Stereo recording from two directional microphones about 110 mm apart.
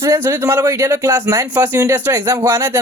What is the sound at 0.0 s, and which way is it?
Speech, 25° right (ahead or behind).